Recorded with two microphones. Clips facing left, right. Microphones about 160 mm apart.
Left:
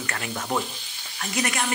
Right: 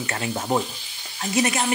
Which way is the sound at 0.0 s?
25° right (ahead or behind).